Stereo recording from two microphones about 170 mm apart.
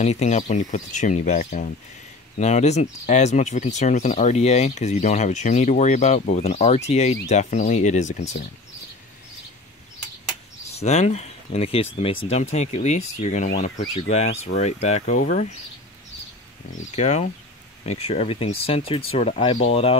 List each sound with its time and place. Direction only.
0.0 s speech: 40° left (ahead or behind)
10.7 s speech: 40° left (ahead or behind)
16.9 s speech: 45° left (ahead or behind)